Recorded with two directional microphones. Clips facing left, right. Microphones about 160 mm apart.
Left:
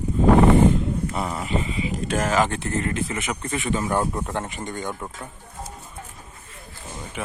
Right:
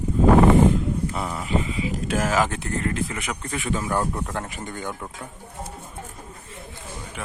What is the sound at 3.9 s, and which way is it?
Speech, 15° left (ahead or behind).